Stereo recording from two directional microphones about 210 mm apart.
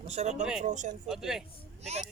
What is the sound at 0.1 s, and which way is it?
Speech, 30° right (ahead or behind).